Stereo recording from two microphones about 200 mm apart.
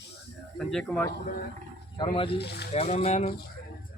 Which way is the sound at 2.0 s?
25° left (ahead or behind).